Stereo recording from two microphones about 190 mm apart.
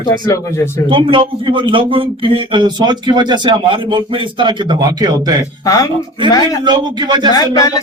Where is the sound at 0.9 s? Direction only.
25° right (ahead or behind).